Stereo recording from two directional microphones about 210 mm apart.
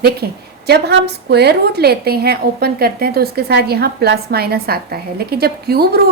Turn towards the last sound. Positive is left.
turn(degrees=-50)  # may be behind; listen again after turning